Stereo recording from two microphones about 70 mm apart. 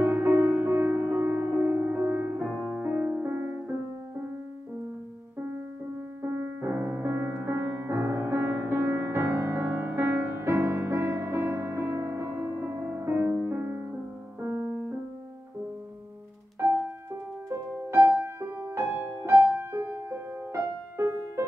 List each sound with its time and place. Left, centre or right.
0.0 s music: right
0.7 s music: right
2.6 s music: right
6.2 s music: right
18.2 s music: right